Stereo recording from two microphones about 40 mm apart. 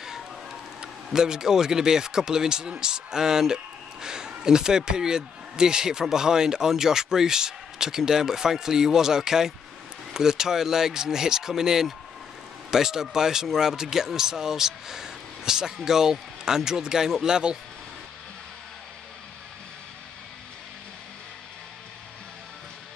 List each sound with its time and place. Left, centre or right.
0.7 s speech: centre